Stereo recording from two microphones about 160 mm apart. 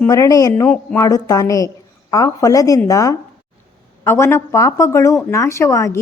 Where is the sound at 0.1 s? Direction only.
20° left (ahead or behind).